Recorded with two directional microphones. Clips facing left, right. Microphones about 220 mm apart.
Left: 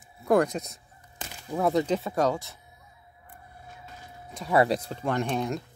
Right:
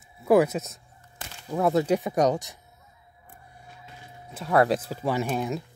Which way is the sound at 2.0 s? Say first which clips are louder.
Right 3 dB; 15° right (ahead or behind).